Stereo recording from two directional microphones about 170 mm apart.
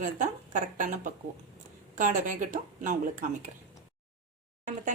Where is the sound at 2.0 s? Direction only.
50° right (ahead or behind).